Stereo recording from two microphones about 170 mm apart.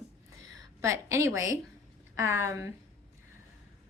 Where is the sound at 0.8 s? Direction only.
15° right (ahead or behind).